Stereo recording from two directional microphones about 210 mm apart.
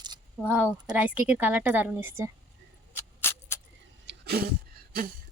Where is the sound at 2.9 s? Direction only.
10° left (ahead or behind).